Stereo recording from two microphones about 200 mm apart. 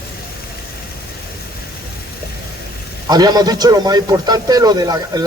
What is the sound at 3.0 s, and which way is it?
A man's voice, 20° right (ahead or behind).